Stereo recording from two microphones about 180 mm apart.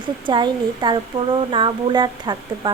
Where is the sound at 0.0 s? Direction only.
25° right (ahead or behind).